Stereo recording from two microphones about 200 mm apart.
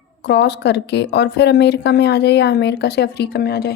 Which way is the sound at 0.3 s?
55° left (ahead or behind).